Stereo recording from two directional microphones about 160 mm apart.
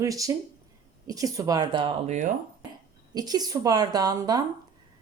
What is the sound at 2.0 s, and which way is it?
Speech, 50° right (ahead or behind).